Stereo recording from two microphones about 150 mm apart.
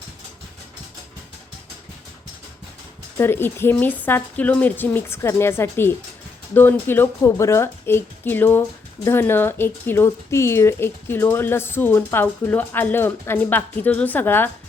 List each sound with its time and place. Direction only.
3.2 s speech: 15° left (ahead or behind)